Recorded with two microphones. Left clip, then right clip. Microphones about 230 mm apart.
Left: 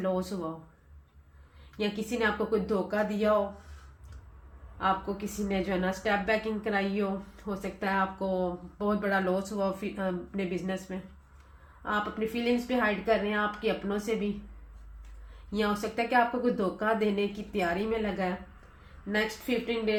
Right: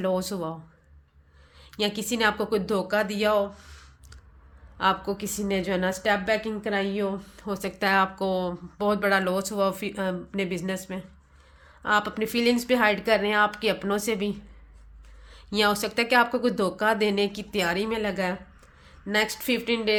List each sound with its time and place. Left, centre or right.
0.0 s a woman's voice: right
1.7 s a woman's voice: right
4.8 s a woman's voice: right
15.4 s a woman's voice: right
19.6 s a woman's voice: right